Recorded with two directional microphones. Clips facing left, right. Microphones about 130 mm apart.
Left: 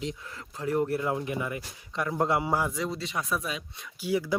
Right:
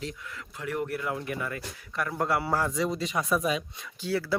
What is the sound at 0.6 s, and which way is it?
Speech, 30° left (ahead or behind).